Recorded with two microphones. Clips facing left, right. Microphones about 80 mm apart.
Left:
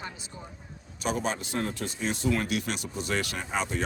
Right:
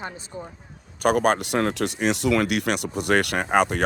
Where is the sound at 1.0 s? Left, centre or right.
Right.